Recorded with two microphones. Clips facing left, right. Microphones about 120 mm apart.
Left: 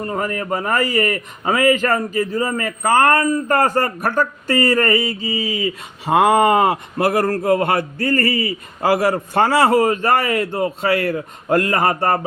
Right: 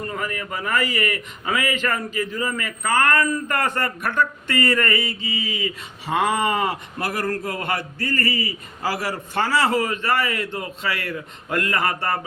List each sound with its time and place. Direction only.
0.0 s a man's voice: 35° left (ahead or behind)
6.1 s a man's voice: 50° left (ahead or behind)